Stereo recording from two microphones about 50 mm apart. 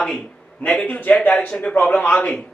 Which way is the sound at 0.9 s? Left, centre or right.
Left.